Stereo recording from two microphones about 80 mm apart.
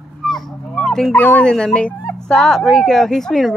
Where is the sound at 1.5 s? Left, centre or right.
Centre.